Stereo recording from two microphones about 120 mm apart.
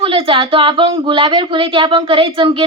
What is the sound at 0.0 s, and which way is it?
A woman's voice, 50° right (ahead or behind).